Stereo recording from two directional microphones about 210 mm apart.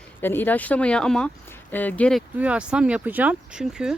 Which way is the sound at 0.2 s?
10° left (ahead or behind).